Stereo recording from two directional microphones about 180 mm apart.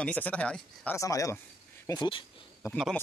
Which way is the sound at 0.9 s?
20° left (ahead or behind).